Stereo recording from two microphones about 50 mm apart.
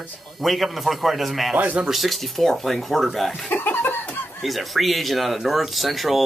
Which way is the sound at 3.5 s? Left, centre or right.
Left.